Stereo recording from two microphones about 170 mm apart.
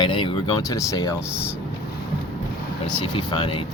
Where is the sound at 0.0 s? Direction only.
30° left (ahead or behind).